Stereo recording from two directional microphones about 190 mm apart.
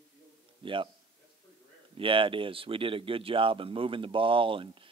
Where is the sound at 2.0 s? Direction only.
25° right (ahead or behind).